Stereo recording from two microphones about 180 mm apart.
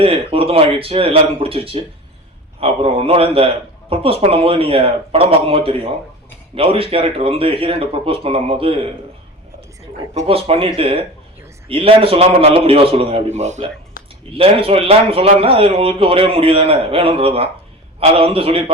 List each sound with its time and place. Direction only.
0.0 s a man's voice: 30° right (ahead or behind)
10.2 s a man's voice: 35° right (ahead or behind)